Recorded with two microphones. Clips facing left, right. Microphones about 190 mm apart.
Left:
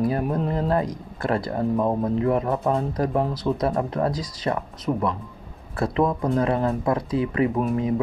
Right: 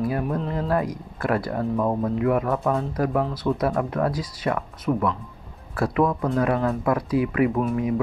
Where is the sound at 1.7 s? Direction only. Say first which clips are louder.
Left 1 dB; 20° left (ahead or behind).